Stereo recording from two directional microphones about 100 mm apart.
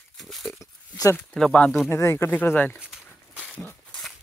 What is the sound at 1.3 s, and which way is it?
Speech, 10° left (ahead or behind).